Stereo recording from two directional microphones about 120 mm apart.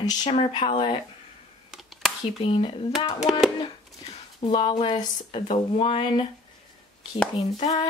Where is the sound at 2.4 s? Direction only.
50° left (ahead or behind).